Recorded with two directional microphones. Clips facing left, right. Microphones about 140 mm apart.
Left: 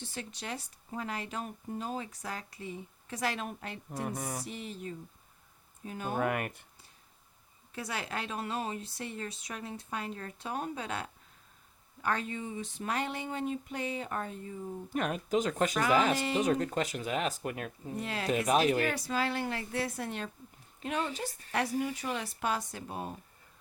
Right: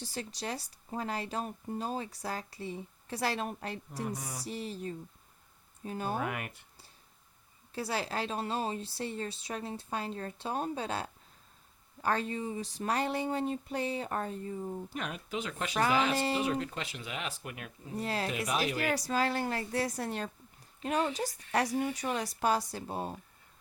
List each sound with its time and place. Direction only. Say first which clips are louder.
0.0 s speech: right 3 dB; 35° right (ahead or behind)
4.2 s music: left 5 dB; 55° left (ahead or behind)
4.4 s speech: right 3 dB; 35° right (ahead or behind)
6.1 s speech: left 4 dB; 50° left (ahead or behind)
7.7 s speech: right 3 dB; 30° right (ahead or behind)
14.9 s speech: left 12 dB; 45° left (ahead or behind)
16.1 s speech: right 1 dB; 35° right (ahead or behind)
16.4 s speech: left 4 dB; 45° left (ahead or behind)
18.0 s speech: right 3 dB; 35° right (ahead or behind)
18.3 s speech: left 6 dB; 40° left (ahead or behind)
18.9 s speech: right 2 dB; 40° right (ahead or behind)